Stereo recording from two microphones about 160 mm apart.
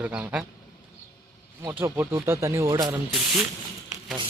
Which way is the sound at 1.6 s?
15° right (ahead or behind).